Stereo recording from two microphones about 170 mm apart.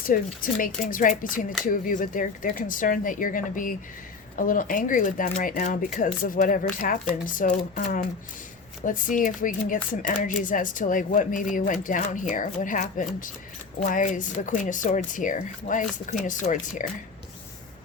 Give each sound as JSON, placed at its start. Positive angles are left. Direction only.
{"t": 0.0, "sound": "speech", "side_deg": 55}